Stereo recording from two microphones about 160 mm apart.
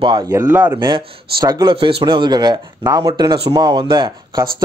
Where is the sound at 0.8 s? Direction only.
25° right (ahead or behind).